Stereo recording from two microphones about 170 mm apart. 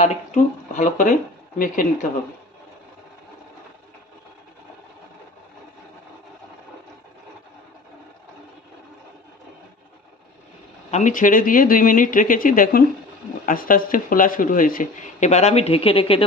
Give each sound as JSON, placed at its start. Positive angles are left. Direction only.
{"t": 0.0, "sound": "speech", "side_deg": 45}
{"t": 10.9, "sound": "speech", "side_deg": 50}